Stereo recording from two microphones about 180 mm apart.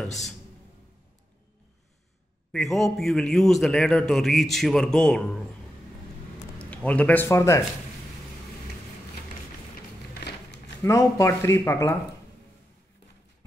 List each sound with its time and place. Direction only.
2.5 s a man's voice: centre (ahead or behind)
6.6 s a man's voice: 10° left (ahead or behind)
10.8 s speech: 15° left (ahead or behind)